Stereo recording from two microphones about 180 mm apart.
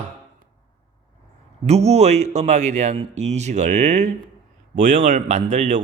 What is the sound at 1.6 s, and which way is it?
Speech, 35° right (ahead or behind).